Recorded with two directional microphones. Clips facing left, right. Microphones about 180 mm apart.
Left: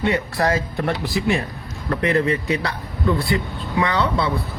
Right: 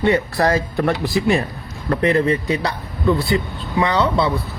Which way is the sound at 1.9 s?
35° right (ahead or behind).